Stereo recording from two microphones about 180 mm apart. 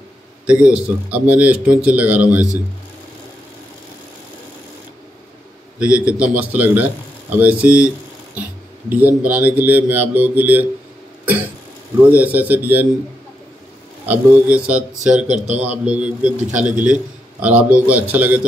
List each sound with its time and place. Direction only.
0.5 s speech: 5° right (ahead or behind)
5.8 s speech: 5° right (ahead or behind)
12.1 s speech: 10° right (ahead or behind)
14.0 s speech: 5° right (ahead or behind)